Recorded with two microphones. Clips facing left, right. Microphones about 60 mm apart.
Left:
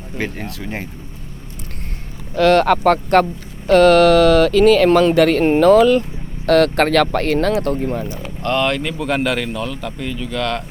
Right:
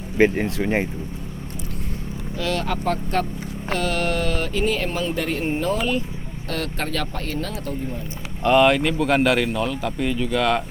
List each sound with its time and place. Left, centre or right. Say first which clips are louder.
0.2 s speech: right 8 dB; right
2.3 s speech: left 13 dB; left
8.4 s speech: right 3 dB; centre